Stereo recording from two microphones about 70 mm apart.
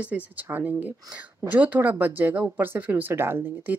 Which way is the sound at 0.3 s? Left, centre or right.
Right.